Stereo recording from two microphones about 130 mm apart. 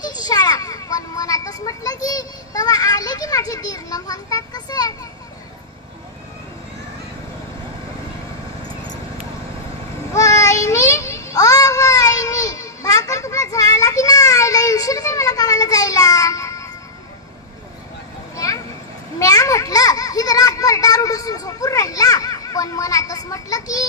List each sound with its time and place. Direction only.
0.0 s children playing: 30° left (ahead or behind)
10.1 s child singing: 25° left (ahead or behind)
18.3 s a sound: 25° left (ahead or behind)